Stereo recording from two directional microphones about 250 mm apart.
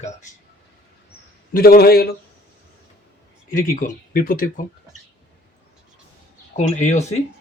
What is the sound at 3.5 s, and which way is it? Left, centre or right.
Speech, left.